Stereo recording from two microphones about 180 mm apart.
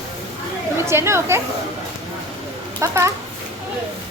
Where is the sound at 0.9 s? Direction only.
15° right (ahead or behind).